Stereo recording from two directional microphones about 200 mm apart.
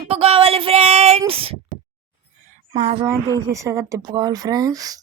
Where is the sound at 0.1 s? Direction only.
30° right (ahead or behind).